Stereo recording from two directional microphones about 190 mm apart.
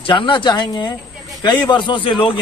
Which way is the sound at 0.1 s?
25° left (ahead or behind).